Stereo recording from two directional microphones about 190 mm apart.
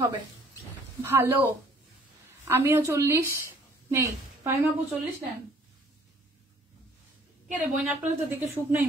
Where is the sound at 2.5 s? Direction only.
15° right (ahead or behind).